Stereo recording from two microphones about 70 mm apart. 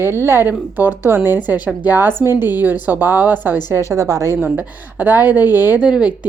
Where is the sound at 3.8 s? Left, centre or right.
Right.